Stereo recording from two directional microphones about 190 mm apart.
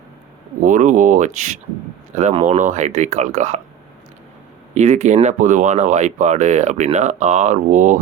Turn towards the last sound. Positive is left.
turn(degrees=-40)  # may be behind; listen again after turning